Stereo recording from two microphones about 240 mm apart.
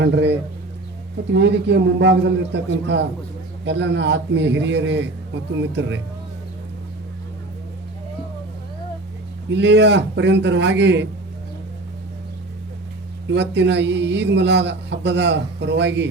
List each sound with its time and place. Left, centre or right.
0.0 s a man's voice: right
9.5 s a man's voice: right
13.3 s a man's voice: right